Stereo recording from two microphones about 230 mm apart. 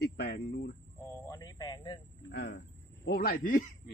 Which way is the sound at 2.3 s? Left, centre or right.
Left.